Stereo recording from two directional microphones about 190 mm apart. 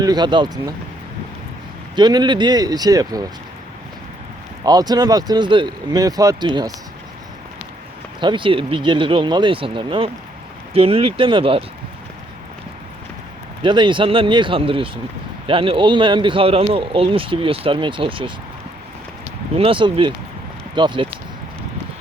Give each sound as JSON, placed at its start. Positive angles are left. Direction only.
{"t": 0.0, "sound": "speech", "side_deg": -20}
{"t": 2.0, "sound": "speech", "side_deg": -20}
{"t": 4.6, "sound": "speech", "side_deg": -20}
{"t": 8.2, "sound": "speech", "side_deg": -25}
{"t": 13.6, "sound": "speech", "side_deg": -25}
{"t": 19.5, "sound": "speech", "side_deg": -30}